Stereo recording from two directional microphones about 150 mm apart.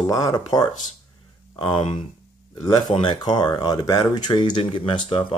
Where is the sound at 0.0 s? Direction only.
20° left (ahead or behind).